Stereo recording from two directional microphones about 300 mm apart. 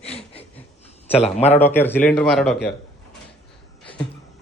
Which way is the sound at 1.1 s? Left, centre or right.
Left.